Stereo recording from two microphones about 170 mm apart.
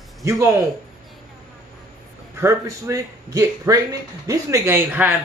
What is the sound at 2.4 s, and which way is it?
A man's voice, 20° right (ahead or behind).